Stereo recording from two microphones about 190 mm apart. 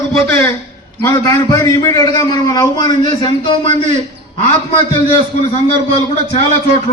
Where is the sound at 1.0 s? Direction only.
15° left (ahead or behind).